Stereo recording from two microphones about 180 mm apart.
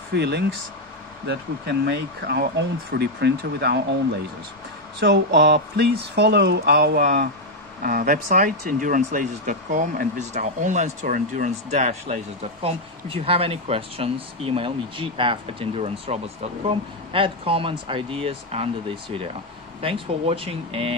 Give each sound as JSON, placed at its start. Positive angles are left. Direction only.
{"t": 0.1, "sound": "speech", "side_deg": -65}
{"t": 5.0, "sound": "speech", "side_deg": -75}